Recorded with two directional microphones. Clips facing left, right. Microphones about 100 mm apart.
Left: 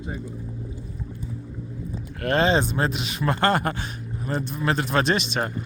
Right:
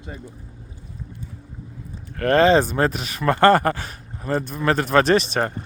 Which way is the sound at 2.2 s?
45° right (ahead or behind).